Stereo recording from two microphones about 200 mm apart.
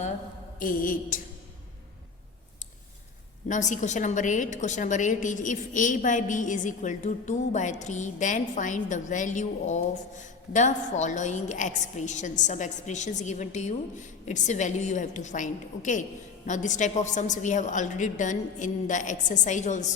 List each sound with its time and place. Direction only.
0.6 s a woman's voice: 45° left (ahead or behind)
3.5 s a woman's voice: 35° left (ahead or behind)